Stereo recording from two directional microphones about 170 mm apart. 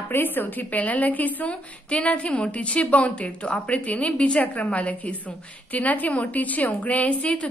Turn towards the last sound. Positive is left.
turn(degrees=5)  # may be behind; listen again after turning